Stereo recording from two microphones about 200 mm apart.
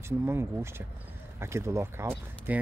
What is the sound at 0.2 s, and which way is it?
Speech, 15° right (ahead or behind).